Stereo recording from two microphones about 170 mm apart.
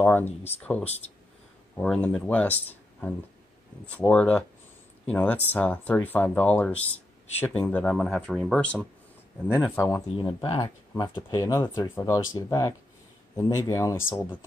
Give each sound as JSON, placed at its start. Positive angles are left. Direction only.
{"t": 0.0, "sound": "speech", "side_deg": 10}
{"t": 9.6, "sound": "speech", "side_deg": 15}
{"t": 10.1, "sound": "speech", "side_deg": 30}